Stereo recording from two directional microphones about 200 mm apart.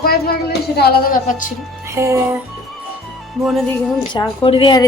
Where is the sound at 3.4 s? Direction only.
Centre (ahead or behind).